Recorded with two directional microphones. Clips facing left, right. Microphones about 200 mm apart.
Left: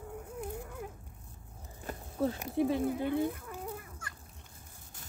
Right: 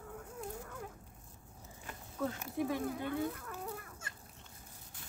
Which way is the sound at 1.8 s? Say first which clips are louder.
Left 6 dB; 35° left (ahead or behind).